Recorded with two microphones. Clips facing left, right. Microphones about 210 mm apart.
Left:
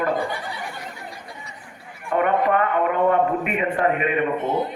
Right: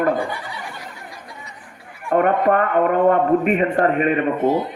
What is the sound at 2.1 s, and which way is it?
Speech, 45° right (ahead or behind).